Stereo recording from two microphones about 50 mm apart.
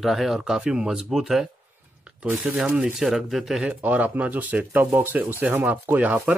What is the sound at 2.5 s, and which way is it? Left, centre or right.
Speech, right.